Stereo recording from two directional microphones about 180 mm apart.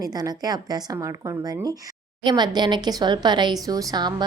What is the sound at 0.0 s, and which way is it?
A woman's voice, 20° right (ahead or behind).